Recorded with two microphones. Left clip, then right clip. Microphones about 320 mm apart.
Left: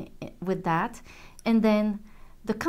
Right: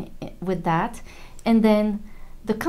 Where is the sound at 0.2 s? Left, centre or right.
Left.